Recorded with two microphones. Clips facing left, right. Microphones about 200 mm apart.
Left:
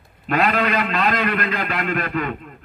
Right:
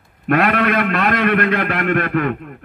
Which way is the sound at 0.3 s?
60° right (ahead or behind).